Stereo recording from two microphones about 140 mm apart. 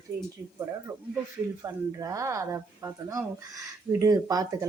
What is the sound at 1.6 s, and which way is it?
A woman's voice, 25° right (ahead or behind).